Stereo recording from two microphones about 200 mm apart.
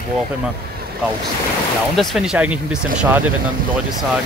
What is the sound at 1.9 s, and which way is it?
Speech, centre (ahead or behind).